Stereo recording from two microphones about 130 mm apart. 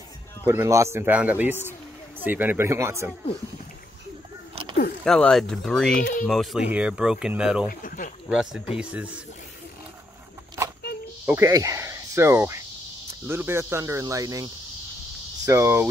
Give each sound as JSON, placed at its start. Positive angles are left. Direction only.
{"t": 0.5, "sound": "speech", "side_deg": -20}
{"t": 5.0, "sound": "speech", "side_deg": 5}
{"t": 7.8, "sound": "speech", "side_deg": 90}
{"t": 8.3, "sound": "speech", "side_deg": -5}
{"t": 11.2, "sound": "speech", "side_deg": -20}